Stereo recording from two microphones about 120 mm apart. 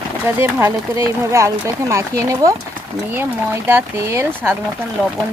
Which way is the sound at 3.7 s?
20° right (ahead or behind).